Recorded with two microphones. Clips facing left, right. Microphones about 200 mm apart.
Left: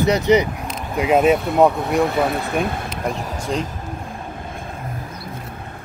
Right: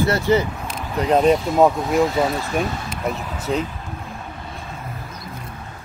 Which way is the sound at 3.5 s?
5° right (ahead or behind).